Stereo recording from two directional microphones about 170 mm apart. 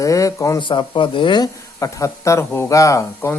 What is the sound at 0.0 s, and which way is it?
Speech, 20° left (ahead or behind).